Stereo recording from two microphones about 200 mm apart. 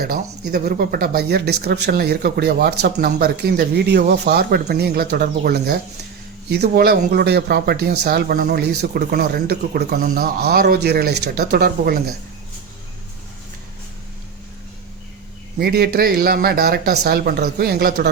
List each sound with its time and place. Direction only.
0.0 s speech: 50° right (ahead or behind)
15.5 s speech: 50° right (ahead or behind)